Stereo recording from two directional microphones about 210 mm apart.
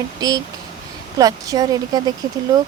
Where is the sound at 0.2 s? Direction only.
20° right (ahead or behind).